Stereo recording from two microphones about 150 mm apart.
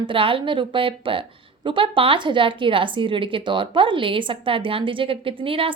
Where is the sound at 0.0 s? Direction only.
35° right (ahead or behind).